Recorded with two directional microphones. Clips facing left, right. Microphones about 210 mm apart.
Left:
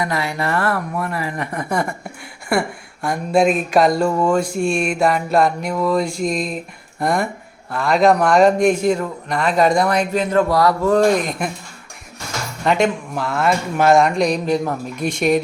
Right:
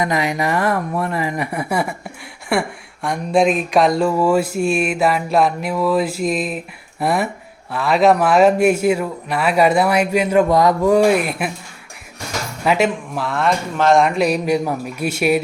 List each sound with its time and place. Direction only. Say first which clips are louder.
0.0 s a man's voice: right 3 dB; 15° right (ahead or behind)
12.6 s speech: even; 5° right (ahead or behind)